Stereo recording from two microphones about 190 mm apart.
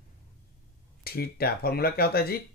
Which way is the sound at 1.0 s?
55° left (ahead or behind).